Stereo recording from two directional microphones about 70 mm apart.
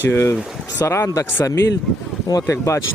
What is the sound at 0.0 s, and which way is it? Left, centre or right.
Speech, left.